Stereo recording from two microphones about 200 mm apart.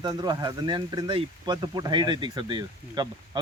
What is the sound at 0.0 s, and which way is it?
Speech, 20° right (ahead or behind).